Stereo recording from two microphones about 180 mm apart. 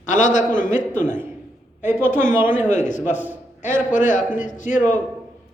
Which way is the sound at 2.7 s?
45° left (ahead or behind).